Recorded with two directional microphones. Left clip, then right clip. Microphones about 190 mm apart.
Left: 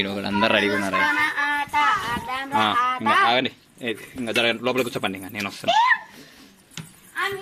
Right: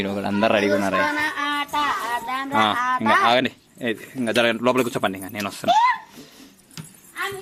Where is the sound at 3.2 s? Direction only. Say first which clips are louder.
Right 2 dB; 25° right (ahead or behind).